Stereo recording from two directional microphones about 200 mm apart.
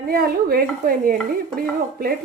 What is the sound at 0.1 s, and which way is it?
Stir, 45° right (ahead or behind).